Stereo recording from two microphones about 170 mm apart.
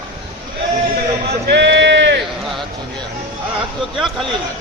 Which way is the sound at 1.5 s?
90° right.